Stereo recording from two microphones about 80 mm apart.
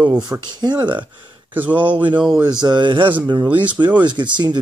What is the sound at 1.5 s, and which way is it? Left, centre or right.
Speech, right.